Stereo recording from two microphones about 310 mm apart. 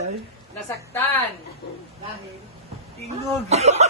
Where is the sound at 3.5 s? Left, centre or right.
Right.